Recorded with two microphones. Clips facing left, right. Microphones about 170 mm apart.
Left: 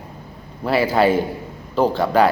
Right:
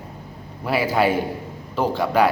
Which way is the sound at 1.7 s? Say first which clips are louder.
Left 4 dB; 30° left (ahead or behind).